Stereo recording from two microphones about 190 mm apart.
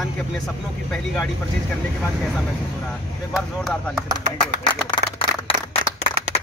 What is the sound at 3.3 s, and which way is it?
Speech, centre (ahead or behind).